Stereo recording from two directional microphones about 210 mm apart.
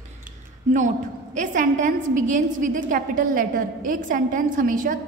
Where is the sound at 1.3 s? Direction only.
35° right (ahead or behind).